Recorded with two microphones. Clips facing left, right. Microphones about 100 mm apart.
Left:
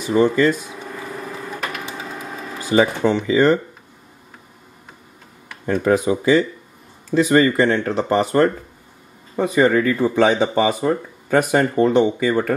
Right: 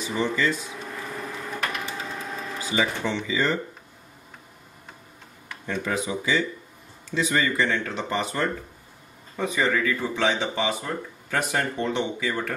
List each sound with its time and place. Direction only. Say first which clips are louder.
0.0 s speech: left 9 dB; 50° left (ahead or behind)
2.6 s speech: left 10 dB; 45° left (ahead or behind)
5.7 s speech: left 11 dB; 50° left (ahead or behind)
9.6 s speech: left 9 dB; 50° left (ahead or behind)